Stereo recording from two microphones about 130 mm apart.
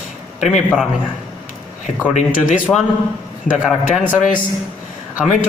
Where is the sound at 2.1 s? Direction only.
80° left.